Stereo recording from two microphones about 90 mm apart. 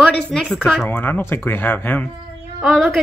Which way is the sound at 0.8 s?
20° left (ahead or behind).